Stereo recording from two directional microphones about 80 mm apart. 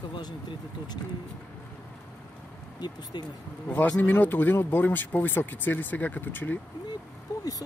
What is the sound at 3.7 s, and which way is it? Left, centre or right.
Speech, centre.